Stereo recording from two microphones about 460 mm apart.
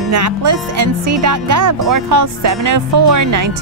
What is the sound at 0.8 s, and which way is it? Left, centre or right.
Speech, right.